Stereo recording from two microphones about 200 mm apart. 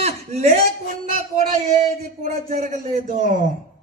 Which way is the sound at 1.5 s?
35° right (ahead or behind).